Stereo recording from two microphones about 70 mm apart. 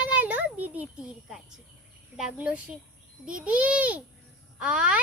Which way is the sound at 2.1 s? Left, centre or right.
Centre.